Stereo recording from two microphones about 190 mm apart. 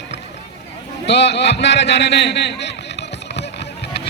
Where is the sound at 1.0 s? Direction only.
65° left (ahead or behind).